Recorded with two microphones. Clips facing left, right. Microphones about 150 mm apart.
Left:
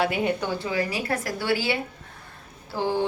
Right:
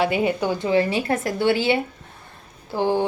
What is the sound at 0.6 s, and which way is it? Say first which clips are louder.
A woman's voice: right 7 dB; 25° right (ahead or behind).